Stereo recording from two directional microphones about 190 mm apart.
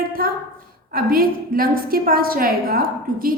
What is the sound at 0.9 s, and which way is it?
A woman's voice, 50° right (ahead or behind).